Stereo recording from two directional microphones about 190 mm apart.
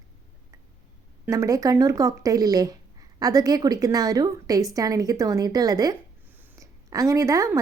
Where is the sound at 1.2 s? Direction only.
15° right (ahead or behind).